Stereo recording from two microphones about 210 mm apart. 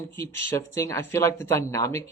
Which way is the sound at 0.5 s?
15° left (ahead or behind).